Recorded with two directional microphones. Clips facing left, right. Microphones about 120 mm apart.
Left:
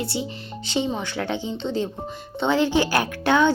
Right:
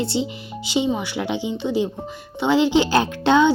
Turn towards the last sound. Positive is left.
turn(degrees=-20)  # may be behind; listen again after turning